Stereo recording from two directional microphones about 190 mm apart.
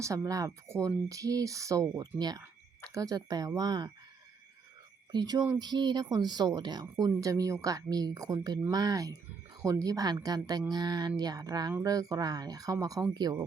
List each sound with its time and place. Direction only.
0.0 s speech: 15° right (ahead or behind)
5.1 s speech: 20° right (ahead or behind)